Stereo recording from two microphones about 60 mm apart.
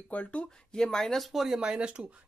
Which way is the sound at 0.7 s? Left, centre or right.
Centre.